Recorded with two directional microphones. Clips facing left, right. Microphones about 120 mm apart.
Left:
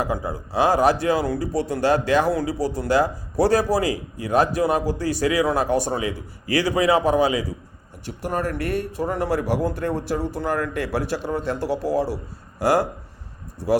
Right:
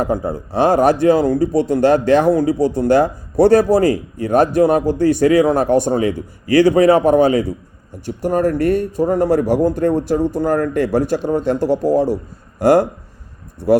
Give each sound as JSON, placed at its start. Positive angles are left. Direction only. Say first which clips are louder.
{"t": 0.0, "sound": "a man's voice", "louder": "right 6 dB", "side_deg": -55}
{"t": 8.0, "sound": "a man's voice", "louder": "right 9 dB", "side_deg": -45}